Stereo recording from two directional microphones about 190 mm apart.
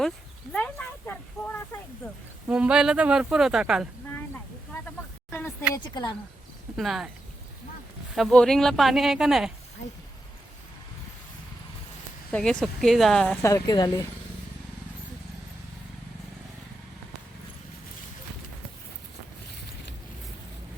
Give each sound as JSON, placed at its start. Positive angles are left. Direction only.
{"t": 0.5, "sound": "a sound", "side_deg": 5}
{"t": 2.5, "sound": "speech", "side_deg": -5}
{"t": 5.7, "sound": "speech", "side_deg": 20}
{"t": 6.7, "sound": "speech", "side_deg": 0}
{"t": 8.1, "sound": "speech", "side_deg": 0}
{"t": 12.3, "sound": "speech", "side_deg": 5}
{"t": 13.4, "sound": "speech", "side_deg": 20}